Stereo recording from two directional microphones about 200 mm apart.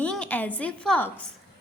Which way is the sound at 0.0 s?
5° left (ahead or behind).